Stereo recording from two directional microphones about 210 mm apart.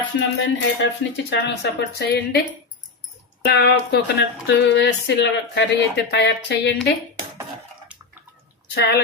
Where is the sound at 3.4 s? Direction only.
55° left (ahead or behind).